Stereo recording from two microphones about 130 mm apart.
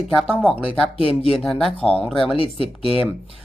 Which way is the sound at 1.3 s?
Centre (ahead or behind).